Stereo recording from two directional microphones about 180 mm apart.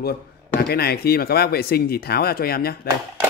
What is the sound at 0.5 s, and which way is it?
Speech, 60° left (ahead or behind).